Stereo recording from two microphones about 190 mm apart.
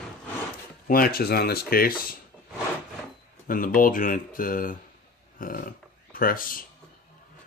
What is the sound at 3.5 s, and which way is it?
Speech, 45° left (ahead or behind).